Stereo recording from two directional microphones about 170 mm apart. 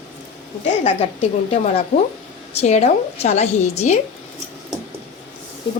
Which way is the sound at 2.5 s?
40° left (ahead or behind).